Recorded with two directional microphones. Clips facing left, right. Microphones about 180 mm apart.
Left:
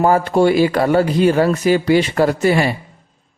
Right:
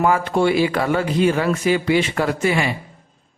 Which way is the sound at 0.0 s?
40° left (ahead or behind).